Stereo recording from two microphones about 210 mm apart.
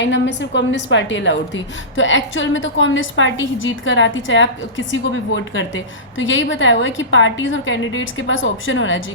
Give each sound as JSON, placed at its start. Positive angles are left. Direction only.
{"t": 0.0, "sound": "a woman's voice", "side_deg": 55}